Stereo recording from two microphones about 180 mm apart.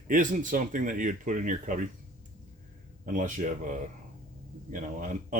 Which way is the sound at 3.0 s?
45° right (ahead or behind).